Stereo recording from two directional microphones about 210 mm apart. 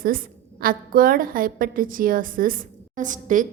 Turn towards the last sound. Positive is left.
turn(degrees=-40)  # may be behind; listen again after turning